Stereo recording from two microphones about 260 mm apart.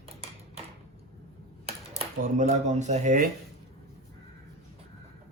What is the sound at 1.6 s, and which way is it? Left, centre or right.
Speech, right.